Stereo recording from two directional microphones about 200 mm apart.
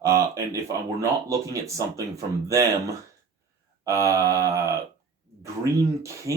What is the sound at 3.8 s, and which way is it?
Speech, 15° right (ahead or behind).